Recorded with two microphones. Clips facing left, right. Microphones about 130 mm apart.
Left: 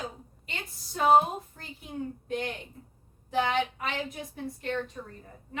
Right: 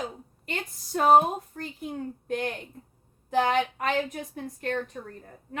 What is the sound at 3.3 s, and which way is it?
A woman's voice, 45° right (ahead or behind).